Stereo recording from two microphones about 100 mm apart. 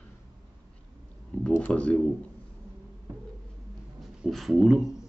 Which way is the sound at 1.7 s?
10° left (ahead or behind).